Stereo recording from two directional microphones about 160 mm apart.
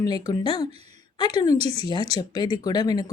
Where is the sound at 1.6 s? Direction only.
40° right (ahead or behind).